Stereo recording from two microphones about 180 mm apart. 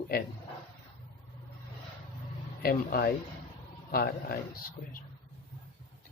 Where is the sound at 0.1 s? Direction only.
60° left (ahead or behind).